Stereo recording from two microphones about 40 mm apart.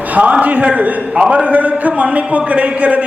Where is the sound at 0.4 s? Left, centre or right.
Right.